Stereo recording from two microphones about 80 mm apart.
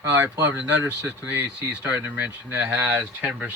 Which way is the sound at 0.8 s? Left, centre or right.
Centre.